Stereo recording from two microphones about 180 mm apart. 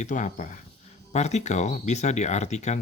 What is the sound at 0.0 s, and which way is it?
Speech, 45° left (ahead or behind).